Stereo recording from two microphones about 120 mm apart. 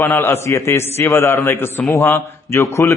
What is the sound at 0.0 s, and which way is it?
A man's voice, 25° left (ahead or behind).